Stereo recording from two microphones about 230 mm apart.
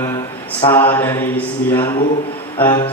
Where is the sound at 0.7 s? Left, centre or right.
Centre.